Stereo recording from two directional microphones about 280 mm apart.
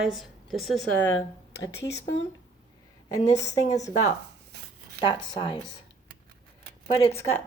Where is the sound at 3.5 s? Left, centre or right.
Centre.